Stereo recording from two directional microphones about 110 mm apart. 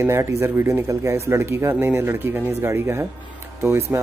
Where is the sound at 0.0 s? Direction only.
25° right (ahead or behind).